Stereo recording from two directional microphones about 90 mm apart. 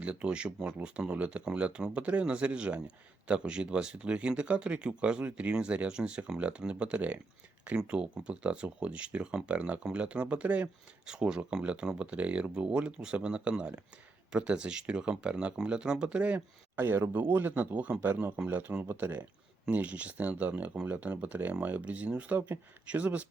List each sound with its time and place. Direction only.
0.0 s speech: 15° right (ahead or behind)
16.7 s a man's voice: 25° right (ahead or behind)